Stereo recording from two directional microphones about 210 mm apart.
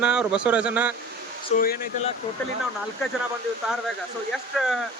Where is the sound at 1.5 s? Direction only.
45° left (ahead or behind).